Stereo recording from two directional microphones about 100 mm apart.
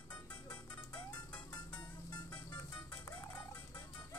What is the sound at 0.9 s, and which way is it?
Music, 15° left (ahead or behind).